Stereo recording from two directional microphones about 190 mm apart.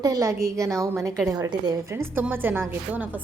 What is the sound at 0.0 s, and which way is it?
A woman's voice, 15° right (ahead or behind).